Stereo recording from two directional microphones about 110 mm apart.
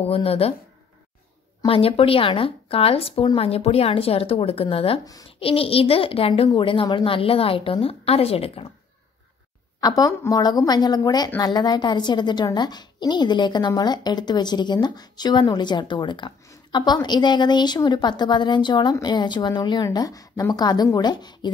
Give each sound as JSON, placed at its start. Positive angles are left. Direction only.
{"t": 0.0, "sound": "a woman's voice", "side_deg": 60}
{"t": 1.7, "sound": "a woman's voice", "side_deg": 60}
{"t": 9.8, "sound": "a woman's voice", "side_deg": 35}